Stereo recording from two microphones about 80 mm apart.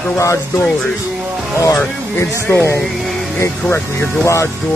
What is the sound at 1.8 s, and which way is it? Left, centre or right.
Speech, left.